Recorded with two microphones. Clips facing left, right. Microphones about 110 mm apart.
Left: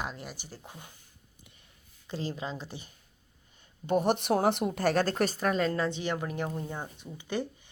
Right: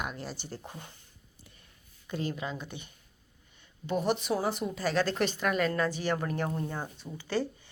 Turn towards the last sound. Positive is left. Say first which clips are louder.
# right 2 dB
turn(degrees=20)  # may be behind; listen again after turning